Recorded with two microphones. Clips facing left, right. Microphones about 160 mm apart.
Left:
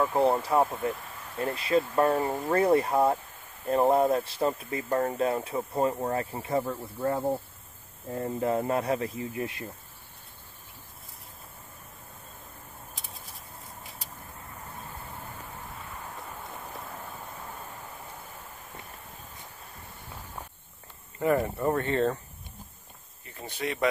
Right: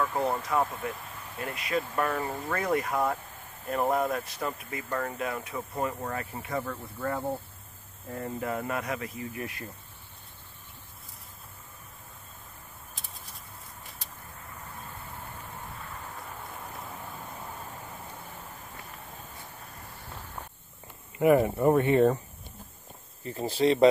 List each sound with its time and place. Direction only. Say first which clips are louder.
0.0 s speech: left 5 dB; 30° left (ahead or behind)
21.2 s speech: right 4 dB; 15° right (ahead or behind)
23.2 s speech: right 9 dB; 30° right (ahead or behind)